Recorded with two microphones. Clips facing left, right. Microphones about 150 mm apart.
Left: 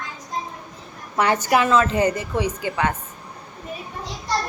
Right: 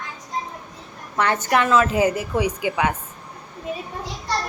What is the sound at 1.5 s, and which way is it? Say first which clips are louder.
A woman's voice: right 1 dB; centre (ahead or behind).